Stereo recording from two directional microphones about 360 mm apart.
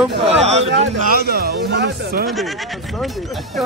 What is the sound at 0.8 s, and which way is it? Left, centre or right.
Speech, right.